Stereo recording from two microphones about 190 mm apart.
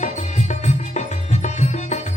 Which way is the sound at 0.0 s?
40° left (ahead or behind).